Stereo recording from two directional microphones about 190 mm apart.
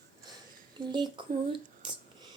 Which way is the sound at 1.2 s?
25° right (ahead or behind).